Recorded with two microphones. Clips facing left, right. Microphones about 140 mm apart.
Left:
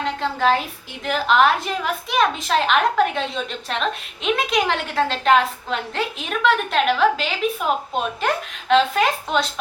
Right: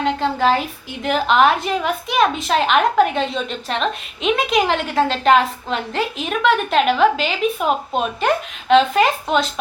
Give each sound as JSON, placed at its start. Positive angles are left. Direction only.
{"t": 0.0, "sound": "a woman's voice", "side_deg": 0}